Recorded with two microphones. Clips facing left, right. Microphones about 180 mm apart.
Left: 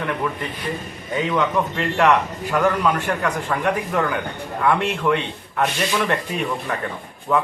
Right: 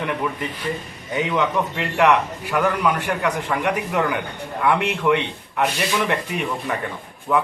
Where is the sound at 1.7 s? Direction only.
10° right (ahead or behind).